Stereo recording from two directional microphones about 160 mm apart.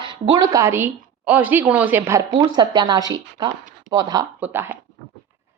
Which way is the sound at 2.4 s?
25° right (ahead or behind).